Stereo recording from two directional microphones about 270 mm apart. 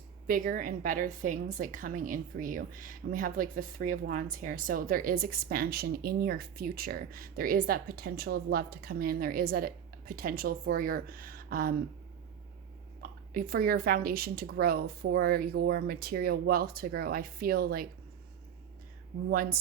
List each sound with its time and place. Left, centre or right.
0.3 s a woman's voice: right
13.0 s a woman's voice: right
19.3 s a woman's voice: right